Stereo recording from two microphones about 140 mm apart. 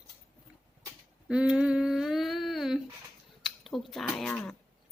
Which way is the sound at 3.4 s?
Centre (ahead or behind).